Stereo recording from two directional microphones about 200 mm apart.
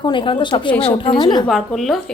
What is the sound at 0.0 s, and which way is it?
A woman's voice, 25° left (ahead or behind).